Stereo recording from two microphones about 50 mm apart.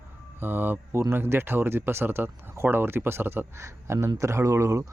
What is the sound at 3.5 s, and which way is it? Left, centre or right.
Speech, right.